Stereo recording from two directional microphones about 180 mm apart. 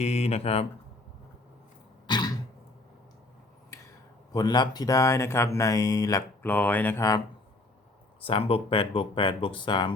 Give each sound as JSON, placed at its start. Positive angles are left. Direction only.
{"t": 0.0, "sound": "speech", "side_deg": 35}
{"t": 2.0, "sound": "throat clearing", "side_deg": 25}
{"t": 4.3, "sound": "speech", "side_deg": 20}
{"t": 8.2, "sound": "speech", "side_deg": 30}